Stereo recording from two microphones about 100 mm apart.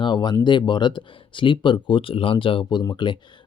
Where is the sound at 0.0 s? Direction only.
50° left (ahead or behind).